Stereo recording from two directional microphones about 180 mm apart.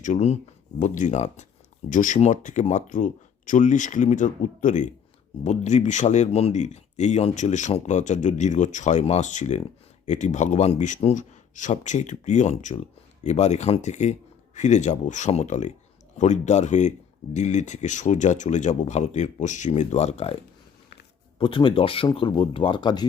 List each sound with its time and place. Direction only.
0.0 s speech: 40° left (ahead or behind)